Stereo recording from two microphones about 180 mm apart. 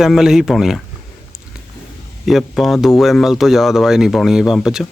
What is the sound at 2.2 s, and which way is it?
Speech, centre (ahead or behind).